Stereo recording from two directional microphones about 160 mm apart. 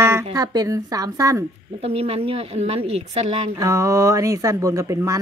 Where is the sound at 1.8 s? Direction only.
40° right (ahead or behind).